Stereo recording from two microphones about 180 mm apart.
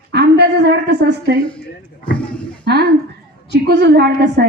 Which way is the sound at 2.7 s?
65° right (ahead or behind).